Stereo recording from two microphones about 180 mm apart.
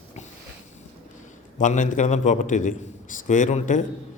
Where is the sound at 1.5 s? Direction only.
45° left (ahead or behind).